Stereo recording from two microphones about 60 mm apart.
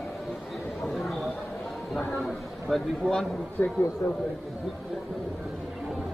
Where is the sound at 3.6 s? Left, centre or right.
Left.